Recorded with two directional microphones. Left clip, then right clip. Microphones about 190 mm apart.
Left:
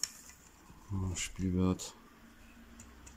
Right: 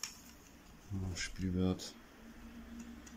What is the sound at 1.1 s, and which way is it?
Speech, 15° left (ahead or behind).